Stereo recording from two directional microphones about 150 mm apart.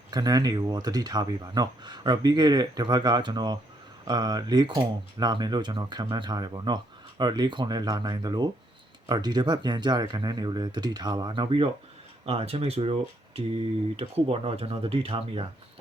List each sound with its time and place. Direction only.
0.1 s speech: 25° right (ahead or behind)